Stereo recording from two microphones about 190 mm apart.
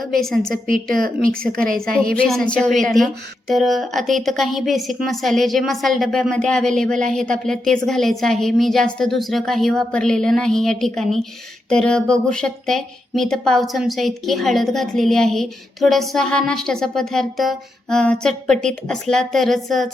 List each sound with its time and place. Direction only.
0.1 s a woman's voice: centre (ahead or behind)
1.6 s a woman's voice: 50° right (ahead or behind)
2.1 s a woman's voice: 5° left (ahead or behind)